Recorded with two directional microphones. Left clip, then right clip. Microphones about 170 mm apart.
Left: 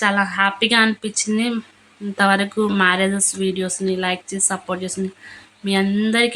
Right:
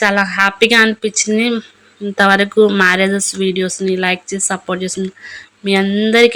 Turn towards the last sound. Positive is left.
turn(degrees=-25)  # may be behind; listen again after turning